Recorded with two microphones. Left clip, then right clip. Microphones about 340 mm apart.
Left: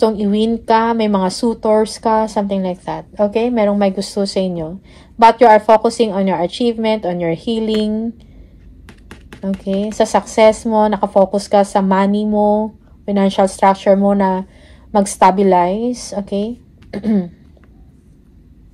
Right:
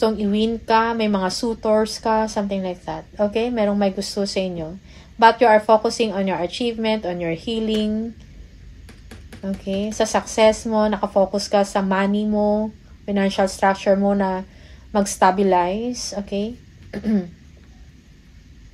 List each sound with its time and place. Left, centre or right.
0.0 s speech: left
9.4 s a woman's voice: left